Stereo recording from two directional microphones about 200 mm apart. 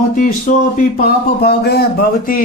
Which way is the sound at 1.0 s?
50° left (ahead or behind).